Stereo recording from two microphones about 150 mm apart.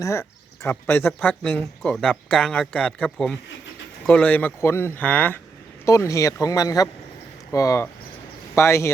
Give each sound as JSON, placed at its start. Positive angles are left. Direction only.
{"t": 0.0, "sound": "speech", "side_deg": 20}